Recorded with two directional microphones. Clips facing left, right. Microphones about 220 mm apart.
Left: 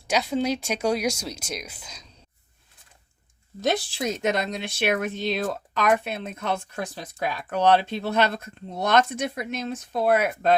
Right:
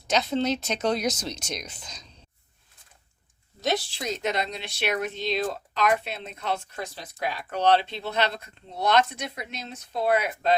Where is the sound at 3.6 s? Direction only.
50° left (ahead or behind).